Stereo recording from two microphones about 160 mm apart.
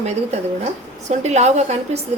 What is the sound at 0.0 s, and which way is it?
A woman's voice, 45° right (ahead or behind).